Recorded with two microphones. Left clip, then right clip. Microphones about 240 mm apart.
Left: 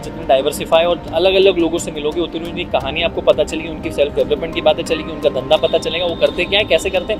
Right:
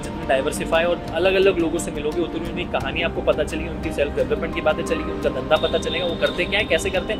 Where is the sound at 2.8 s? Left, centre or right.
Left.